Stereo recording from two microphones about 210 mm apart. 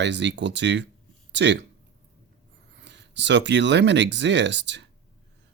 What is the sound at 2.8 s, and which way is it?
Speech, 55° right (ahead or behind).